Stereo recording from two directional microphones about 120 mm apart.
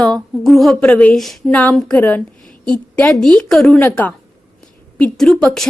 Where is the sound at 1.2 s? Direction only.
Centre (ahead or behind).